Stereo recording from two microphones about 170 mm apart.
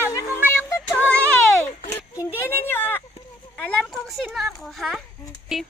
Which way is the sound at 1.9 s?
20° left (ahead or behind).